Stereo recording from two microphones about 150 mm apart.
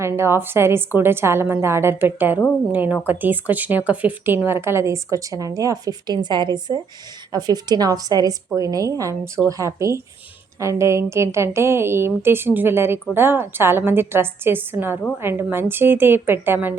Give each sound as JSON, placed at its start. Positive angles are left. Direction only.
{"t": 0.0, "sound": "a woman's voice", "side_deg": -15}